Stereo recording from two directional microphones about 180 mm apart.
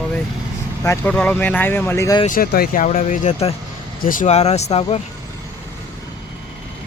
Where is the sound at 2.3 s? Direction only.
55° left (ahead or behind); by 5.0 s 35° left (ahead or behind).